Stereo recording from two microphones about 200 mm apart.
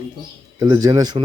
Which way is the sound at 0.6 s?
15° right (ahead or behind).